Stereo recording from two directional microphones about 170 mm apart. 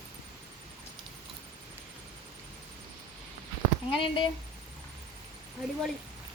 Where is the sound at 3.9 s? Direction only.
30° left (ahead or behind).